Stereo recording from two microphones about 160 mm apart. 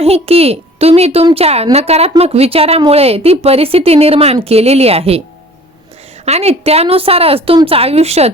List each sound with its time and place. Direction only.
0.0 s speech: 40° right (ahead or behind)
6.2 s speech: 40° right (ahead or behind)